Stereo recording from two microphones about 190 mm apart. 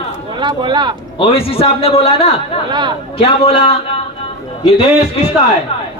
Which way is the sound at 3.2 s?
30° left (ahead or behind).